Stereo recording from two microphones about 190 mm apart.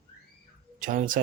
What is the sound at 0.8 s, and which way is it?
Speech, 45° right (ahead or behind).